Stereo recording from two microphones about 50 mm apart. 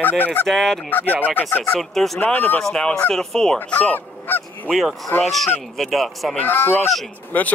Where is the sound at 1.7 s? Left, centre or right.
Centre.